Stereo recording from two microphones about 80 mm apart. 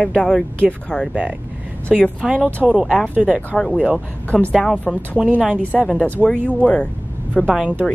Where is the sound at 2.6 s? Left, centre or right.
Centre.